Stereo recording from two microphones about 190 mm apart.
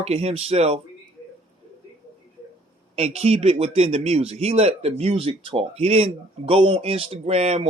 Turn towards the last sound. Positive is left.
turn(degrees=-35)  # may be behind; listen again after turning